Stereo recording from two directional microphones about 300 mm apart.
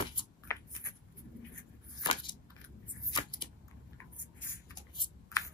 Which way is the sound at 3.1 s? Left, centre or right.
Centre.